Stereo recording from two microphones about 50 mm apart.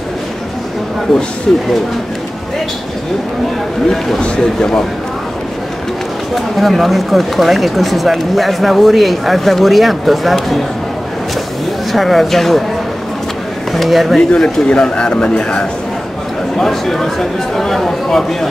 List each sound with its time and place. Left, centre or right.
4.2 s speech: centre
6.3 s speech: centre
11.9 s speech: centre
13.7 s speech: centre
14.3 s speech: centre
16.5 s speech: centre